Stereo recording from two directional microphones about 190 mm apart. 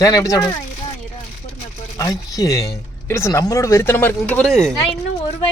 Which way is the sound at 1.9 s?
20° left (ahead or behind).